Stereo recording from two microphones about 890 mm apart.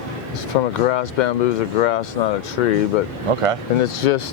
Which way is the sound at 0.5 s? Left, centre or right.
Left.